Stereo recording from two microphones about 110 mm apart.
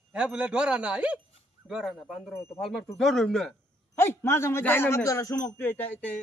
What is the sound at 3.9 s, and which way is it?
Speech, 25° left (ahead or behind).